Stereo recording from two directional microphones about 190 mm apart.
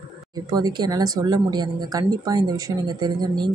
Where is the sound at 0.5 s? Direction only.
20° right (ahead or behind).